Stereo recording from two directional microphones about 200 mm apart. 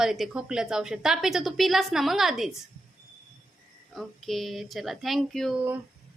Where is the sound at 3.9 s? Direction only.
Centre (ahead or behind).